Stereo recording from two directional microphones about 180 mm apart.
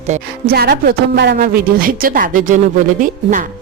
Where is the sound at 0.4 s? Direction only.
60° right (ahead or behind).